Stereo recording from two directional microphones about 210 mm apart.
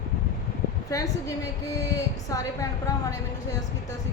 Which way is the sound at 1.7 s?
15° left (ahead or behind).